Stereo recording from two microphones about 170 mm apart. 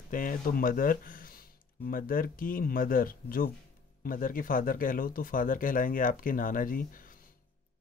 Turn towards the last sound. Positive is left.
turn(degrees=55)  # may be behind; listen again after turning